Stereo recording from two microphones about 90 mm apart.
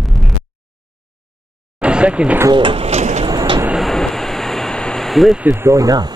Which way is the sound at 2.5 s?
70° right (ahead or behind).